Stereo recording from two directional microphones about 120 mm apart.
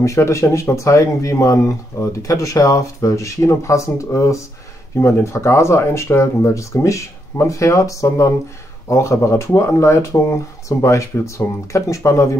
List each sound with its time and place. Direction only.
0.0 s speech: 25° left (ahead or behind)